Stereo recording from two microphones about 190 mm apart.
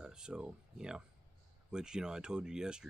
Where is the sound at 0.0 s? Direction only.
5° right (ahead or behind).